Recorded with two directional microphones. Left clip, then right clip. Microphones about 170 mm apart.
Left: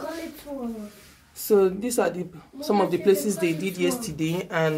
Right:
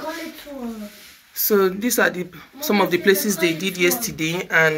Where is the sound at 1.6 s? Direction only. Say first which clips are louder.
Right 4 dB; 10° left (ahead or behind).